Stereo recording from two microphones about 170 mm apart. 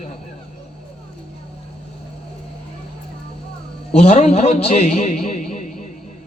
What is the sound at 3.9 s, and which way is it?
A man's voice, 40° left (ahead or behind).